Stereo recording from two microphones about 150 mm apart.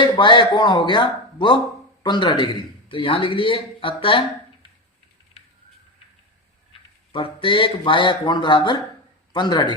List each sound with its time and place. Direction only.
0.0 s a man's voice: 30° left (ahead or behind)
7.1 s a man's voice: 35° left (ahead or behind)